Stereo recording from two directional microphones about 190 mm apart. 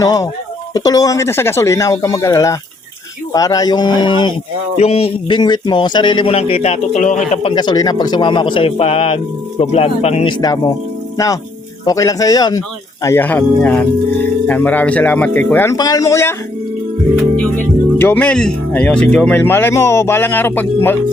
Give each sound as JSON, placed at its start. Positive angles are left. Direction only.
{"t": 0.0, "sound": "speech", "side_deg": 20}
{"t": 7.5, "sound": "speech", "side_deg": 20}
{"t": 10.3, "sound": "speech", "side_deg": 20}
{"t": 11.9, "sound": "speech", "side_deg": 15}
{"t": 17.9, "sound": "speech", "side_deg": 10}